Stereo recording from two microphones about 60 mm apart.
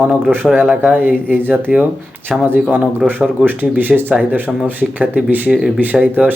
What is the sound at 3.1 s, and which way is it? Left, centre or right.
Speech, right.